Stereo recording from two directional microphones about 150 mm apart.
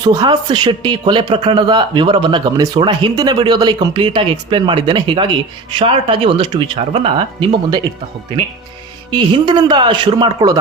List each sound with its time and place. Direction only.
0.0 s speech: 25° right (ahead or behind)
9.1 s speech: 30° right (ahead or behind)